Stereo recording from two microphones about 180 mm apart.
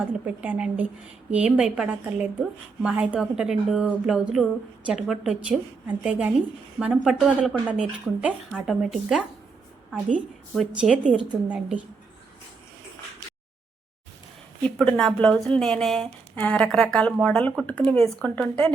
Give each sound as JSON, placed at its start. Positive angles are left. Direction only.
{"t": 0.3, "sound": "a woman's voice", "side_deg": -10}
{"t": 14.6, "sound": "a woman's voice", "side_deg": 5}